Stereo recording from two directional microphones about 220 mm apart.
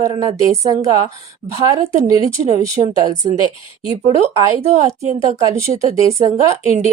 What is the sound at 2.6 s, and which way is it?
Speech, 20° right (ahead or behind).